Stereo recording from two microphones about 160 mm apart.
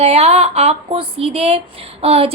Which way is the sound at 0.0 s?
40° right (ahead or behind).